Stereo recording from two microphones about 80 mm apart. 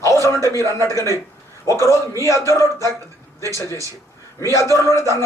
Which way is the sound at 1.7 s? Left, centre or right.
Right.